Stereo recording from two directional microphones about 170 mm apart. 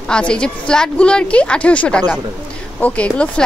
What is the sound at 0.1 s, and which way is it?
A woman's voice, 5° left (ahead or behind).